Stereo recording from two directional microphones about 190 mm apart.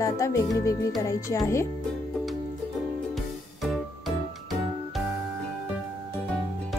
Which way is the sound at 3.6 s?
Centre (ahead or behind).